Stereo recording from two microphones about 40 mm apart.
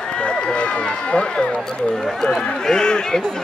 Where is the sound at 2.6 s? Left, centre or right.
Centre.